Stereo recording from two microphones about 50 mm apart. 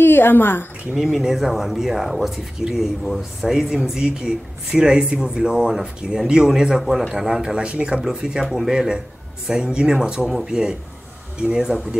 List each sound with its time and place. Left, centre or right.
0.0 s a woman's voice: left
0.9 s speech: centre
8.0 s speech: centre